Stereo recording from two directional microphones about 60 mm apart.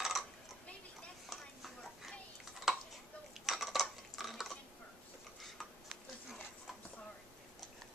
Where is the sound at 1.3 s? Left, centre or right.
Centre.